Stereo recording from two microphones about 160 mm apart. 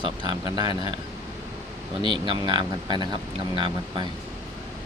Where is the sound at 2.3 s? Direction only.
30° right (ahead or behind).